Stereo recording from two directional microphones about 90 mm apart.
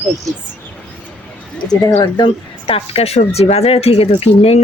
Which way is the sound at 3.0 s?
90° left.